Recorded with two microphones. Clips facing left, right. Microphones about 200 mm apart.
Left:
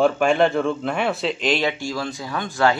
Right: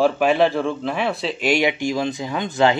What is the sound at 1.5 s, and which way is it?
Speech, 15° right (ahead or behind).